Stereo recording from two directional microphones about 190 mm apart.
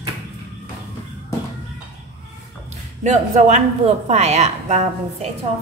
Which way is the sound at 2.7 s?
35° right (ahead or behind).